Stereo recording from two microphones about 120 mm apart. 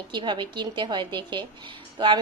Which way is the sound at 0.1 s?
40° right (ahead or behind).